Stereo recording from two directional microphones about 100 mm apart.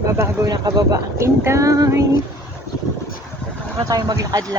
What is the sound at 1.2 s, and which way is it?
Speech, 30° right (ahead or behind).